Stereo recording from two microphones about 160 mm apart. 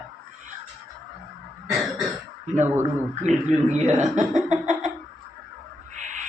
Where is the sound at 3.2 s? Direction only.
45° right (ahead or behind).